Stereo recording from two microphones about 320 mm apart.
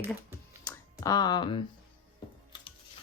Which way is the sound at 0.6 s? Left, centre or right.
Centre.